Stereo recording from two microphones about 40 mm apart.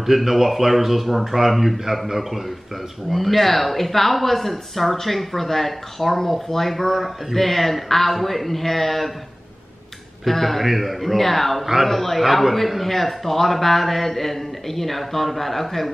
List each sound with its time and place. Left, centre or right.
0.0 s a man's voice: centre
10.2 s a man's voice: centre